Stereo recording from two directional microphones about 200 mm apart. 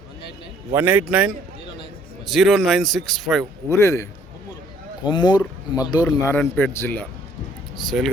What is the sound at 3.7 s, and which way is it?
A man's voice, 15° left (ahead or behind).